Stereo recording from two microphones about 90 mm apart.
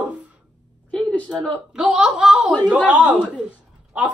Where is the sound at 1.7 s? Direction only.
10° right (ahead or behind).